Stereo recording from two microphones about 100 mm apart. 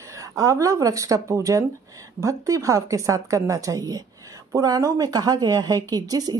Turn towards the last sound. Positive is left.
turn(degrees=-40)  # may be behind; listen again after turning